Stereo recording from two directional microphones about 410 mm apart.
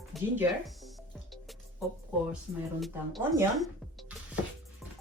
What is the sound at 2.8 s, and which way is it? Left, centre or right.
Speech, centre.